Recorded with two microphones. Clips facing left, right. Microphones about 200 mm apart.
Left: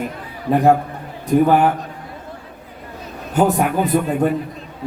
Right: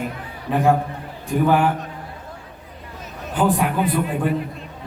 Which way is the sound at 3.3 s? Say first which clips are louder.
Left 3 dB; 45° left (ahead or behind).